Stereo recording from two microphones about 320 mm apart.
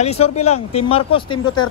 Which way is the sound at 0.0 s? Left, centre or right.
Centre.